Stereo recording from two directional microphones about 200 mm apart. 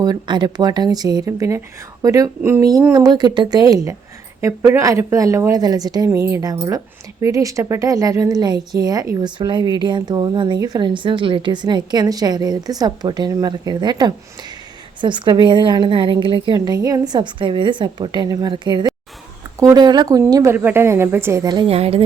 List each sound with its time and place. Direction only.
0.0 s a woman's voice: 20° right (ahead or behind)